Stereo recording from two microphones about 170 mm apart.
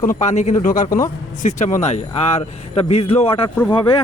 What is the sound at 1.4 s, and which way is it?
A man's voice, 45° left (ahead or behind).